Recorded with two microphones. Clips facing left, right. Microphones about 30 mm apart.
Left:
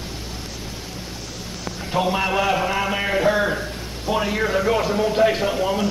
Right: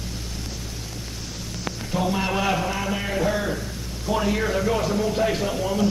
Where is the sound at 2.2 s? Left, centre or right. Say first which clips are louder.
Left 3 dB; centre.